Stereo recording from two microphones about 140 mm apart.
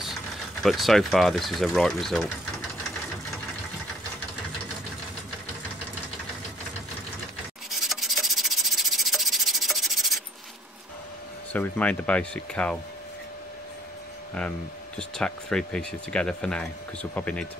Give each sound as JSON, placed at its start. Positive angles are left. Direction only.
{"t": 0.6, "sound": "speech", "side_deg": 0}
{"t": 7.7, "sound": "rub", "side_deg": 0}
{"t": 11.5, "sound": "speech", "side_deg": 10}
{"t": 15.0, "sound": "speech", "side_deg": 5}